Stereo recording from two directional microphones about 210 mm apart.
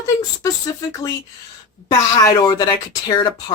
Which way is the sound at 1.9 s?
15° left (ahead or behind).